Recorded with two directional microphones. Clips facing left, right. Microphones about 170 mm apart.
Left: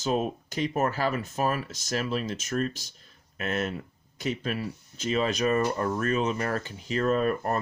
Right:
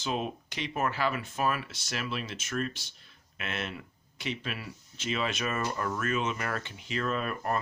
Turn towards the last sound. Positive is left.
turn(degrees=40)  # may be behind; listen again after turning